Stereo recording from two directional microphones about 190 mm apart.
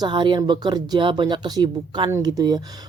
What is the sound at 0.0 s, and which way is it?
Speech, 25° right (ahead or behind).